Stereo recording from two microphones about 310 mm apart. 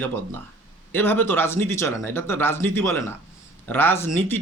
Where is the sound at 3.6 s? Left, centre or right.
Centre.